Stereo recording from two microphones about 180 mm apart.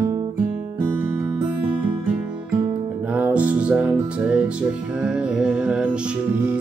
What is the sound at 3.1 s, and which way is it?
Music, 10° right (ahead or behind).